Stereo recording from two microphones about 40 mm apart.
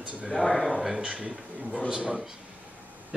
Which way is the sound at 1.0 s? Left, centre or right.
Right.